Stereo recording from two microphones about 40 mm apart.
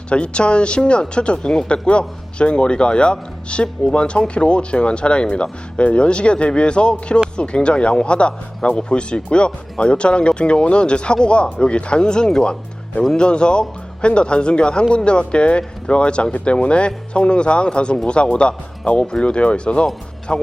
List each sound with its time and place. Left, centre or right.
0.1 s speech: left